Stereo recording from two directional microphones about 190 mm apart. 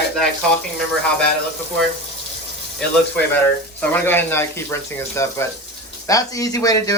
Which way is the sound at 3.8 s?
10° left (ahead or behind).